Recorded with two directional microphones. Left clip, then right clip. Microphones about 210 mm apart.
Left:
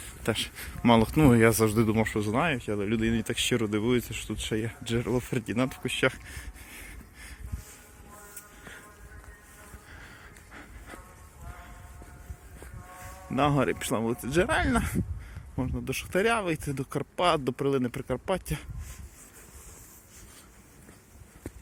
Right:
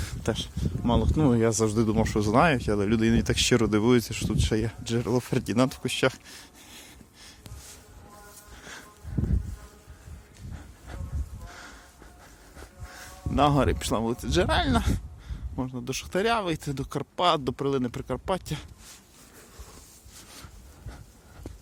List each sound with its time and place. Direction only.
0.4 s speech: 5° left (ahead or behind)
2.1 s speech: 30° right (ahead or behind)
13.3 s speech: 15° right (ahead or behind)